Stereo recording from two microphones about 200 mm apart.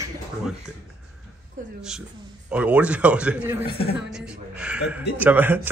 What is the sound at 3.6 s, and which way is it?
Speech, 25° left (ahead or behind).